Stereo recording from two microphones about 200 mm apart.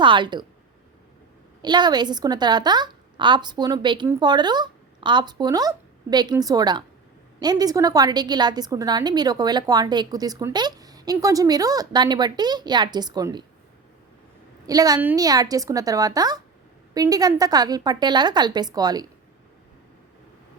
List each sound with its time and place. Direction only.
0.0 s a woman's voice: 25° right (ahead or behind)
1.6 s a woman's voice: 20° right (ahead or behind)
14.7 s a woman's voice: 20° right (ahead or behind)